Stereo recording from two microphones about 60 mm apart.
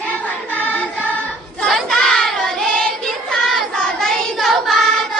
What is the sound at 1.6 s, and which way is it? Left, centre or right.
Child singing, centre.